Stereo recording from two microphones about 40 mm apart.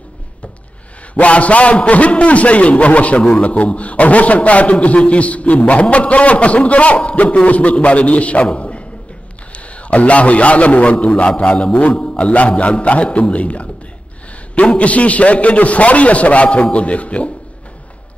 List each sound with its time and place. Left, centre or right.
1.1 s a man's voice: left
9.8 s a man's voice: left